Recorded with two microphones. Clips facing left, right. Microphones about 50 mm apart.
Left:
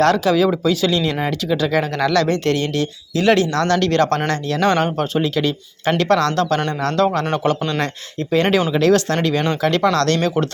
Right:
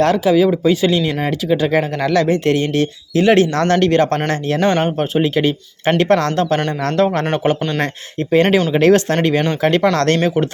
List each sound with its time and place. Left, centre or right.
0.0 s speech: centre
0.6 s speech: right
3.3 s speech: right
3.8 s speech: right
4.3 s speech: right
4.8 s speech: right
8.3 s speech: right